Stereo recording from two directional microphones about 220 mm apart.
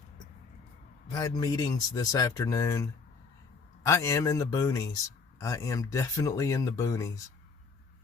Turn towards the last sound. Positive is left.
turn(degrees=15)  # may be behind; listen again after turning